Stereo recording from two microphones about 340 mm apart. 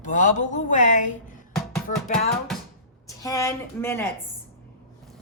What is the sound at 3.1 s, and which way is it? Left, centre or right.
Speech, centre.